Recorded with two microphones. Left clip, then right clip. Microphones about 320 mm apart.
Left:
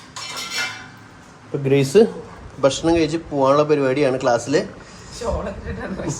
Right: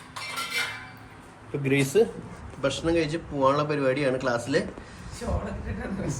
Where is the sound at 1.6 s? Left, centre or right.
Left.